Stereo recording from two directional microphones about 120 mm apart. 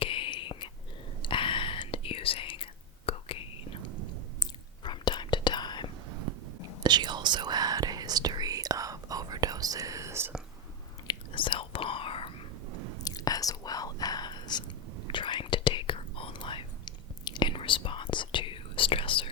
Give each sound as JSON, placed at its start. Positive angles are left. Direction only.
{"t": 0.0, "sound": "whispering", "side_deg": 45}
{"t": 4.8, "sound": "whispering", "side_deg": 40}
{"t": 6.8, "sound": "whispering", "side_deg": -35}
{"t": 11.1, "sound": "whispering", "side_deg": 45}
{"t": 13.1, "sound": "whispering", "side_deg": 30}